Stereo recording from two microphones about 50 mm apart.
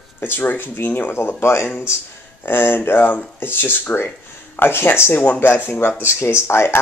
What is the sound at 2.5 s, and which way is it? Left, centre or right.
Speech, left.